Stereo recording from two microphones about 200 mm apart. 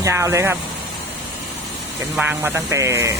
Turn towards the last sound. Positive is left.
turn(degrees=-15)  # may be behind; listen again after turning